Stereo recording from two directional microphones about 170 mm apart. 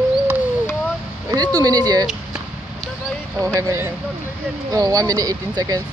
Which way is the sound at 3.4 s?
20° right (ahead or behind).